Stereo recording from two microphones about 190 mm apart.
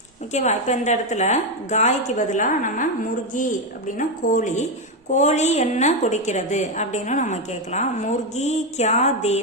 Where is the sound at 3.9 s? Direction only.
45° left (ahead or behind).